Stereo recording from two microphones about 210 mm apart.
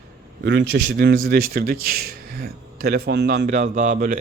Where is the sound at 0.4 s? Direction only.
55° right (ahead or behind).